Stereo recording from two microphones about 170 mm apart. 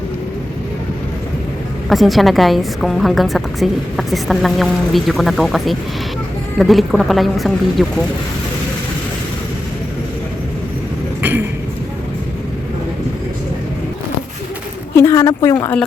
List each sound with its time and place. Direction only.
1.9 s a woman's voice: centre (ahead or behind)
11.2 s a sound: 10° right (ahead or behind)
14.9 s speech: 15° left (ahead or behind)